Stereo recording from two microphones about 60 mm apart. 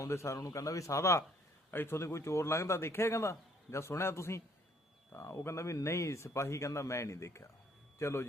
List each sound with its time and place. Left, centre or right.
0.0 s speech: left
1.7 s speech: left